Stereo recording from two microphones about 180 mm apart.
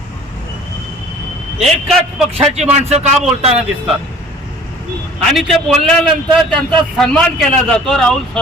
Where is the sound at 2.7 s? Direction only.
40° right (ahead or behind).